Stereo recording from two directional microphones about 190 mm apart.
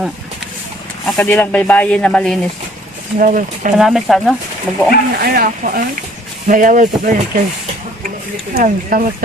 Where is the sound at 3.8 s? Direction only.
Centre (ahead or behind).